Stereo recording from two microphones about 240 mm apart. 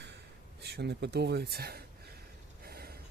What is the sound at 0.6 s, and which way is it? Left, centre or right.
Speech, right.